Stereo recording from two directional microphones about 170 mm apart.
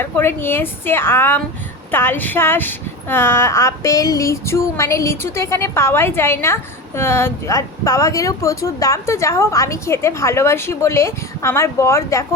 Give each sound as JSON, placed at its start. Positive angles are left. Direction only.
{"t": 0.0, "sound": "a woman's voice", "side_deg": 15}